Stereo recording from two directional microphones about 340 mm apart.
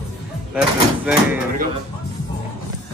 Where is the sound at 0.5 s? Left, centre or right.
Centre.